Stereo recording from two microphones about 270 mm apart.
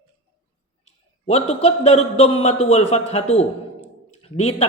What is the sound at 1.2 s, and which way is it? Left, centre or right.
A man's voice, left.